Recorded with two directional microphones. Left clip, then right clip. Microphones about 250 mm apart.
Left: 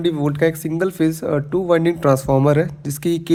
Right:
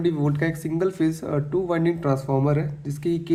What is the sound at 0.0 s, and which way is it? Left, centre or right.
Speech, left.